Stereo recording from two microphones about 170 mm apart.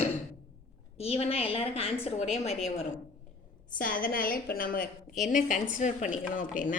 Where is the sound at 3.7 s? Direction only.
55° left (ahead or behind).